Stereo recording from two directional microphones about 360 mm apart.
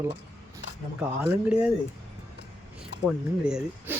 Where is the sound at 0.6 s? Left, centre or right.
Left.